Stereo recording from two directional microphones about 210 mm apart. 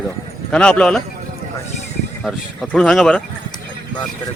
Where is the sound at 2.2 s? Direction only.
5° left (ahead or behind).